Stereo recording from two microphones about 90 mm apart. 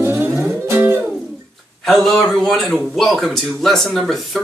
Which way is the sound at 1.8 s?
5° left (ahead or behind).